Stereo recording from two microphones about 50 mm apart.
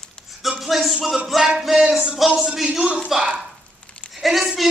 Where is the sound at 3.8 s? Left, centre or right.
Left.